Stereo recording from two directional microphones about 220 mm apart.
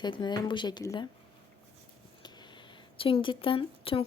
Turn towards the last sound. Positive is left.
turn(degrees=25)  # may be behind; listen again after turning